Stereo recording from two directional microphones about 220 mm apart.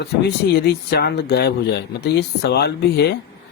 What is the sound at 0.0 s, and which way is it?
Speech, 50° left (ahead or behind).